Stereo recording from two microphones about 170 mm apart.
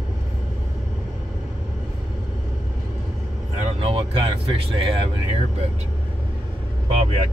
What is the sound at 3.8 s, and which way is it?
Speech, 30° right (ahead or behind).